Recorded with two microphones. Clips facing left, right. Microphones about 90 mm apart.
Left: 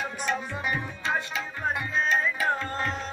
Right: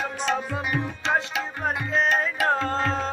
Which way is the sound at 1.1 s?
70° right (ahead or behind).